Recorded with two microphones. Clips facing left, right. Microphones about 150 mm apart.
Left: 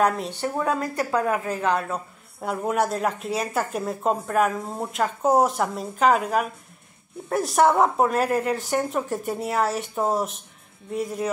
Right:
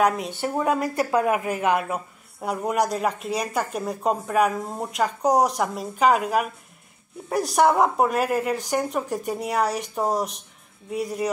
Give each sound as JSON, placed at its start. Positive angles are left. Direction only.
{"t": 0.0, "sound": "speech", "side_deg": -10}
{"t": 2.4, "sound": "speech", "side_deg": 0}